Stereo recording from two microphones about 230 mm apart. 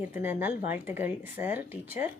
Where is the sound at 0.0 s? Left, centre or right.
Centre.